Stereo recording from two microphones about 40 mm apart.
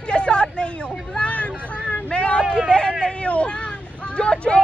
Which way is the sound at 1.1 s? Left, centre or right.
Left.